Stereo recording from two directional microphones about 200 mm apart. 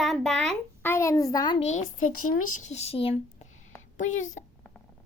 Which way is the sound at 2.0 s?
90° left.